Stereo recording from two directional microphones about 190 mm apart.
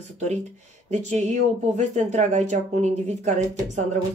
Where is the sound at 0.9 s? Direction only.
35° right (ahead or behind).